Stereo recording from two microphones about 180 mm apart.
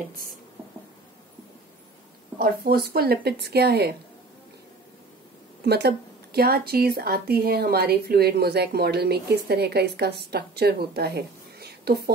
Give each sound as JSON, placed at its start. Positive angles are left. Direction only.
{"t": 2.3, "sound": "speech", "side_deg": -55}
{"t": 5.7, "sound": "speech", "side_deg": -65}